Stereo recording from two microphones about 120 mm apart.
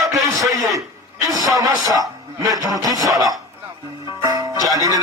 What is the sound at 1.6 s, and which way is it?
A man's voice, 30° right (ahead or behind).